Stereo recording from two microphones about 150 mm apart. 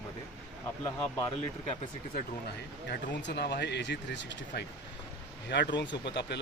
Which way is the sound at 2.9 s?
90° left.